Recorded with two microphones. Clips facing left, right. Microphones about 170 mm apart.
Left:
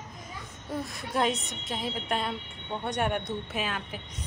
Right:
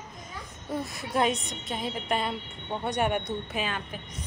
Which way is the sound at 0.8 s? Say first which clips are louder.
Right 1 dB; centre (ahead or behind).